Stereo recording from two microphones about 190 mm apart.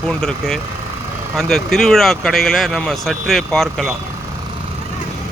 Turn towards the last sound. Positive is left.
turn(degrees=0)  # may be behind; listen again after turning